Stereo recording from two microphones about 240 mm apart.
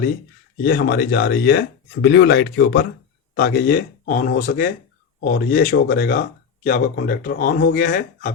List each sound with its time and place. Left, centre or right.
0.6 s speech: left